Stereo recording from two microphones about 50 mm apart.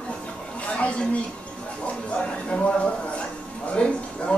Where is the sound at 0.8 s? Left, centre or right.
Left.